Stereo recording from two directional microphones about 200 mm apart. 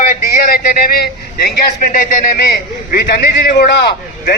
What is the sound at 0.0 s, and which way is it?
A man's voice, 45° left (ahead or behind).